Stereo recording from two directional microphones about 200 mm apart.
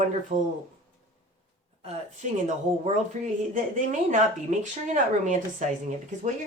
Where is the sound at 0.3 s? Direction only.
35° right (ahead or behind).